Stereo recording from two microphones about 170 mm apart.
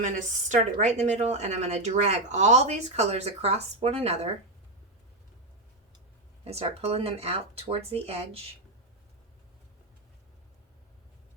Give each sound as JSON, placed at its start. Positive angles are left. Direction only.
{"t": 0.0, "sound": "a woman's voice", "side_deg": -45}
{"t": 6.4, "sound": "a woman's voice", "side_deg": -35}